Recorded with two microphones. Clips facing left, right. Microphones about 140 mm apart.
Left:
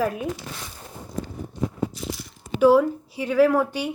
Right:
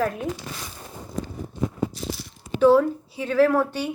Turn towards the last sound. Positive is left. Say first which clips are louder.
# left 1 dB
turn(degrees=10)  # may be behind; listen again after turning